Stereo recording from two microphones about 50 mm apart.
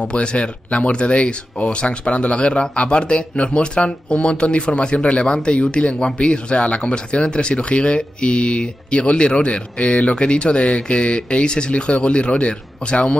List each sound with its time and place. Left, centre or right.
0.0 s speech: left